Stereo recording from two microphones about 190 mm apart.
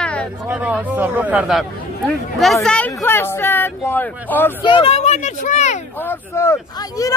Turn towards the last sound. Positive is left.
turn(degrees=15)  # may be behind; listen again after turning